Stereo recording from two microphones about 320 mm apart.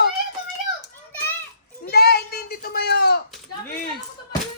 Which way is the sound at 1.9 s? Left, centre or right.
Left.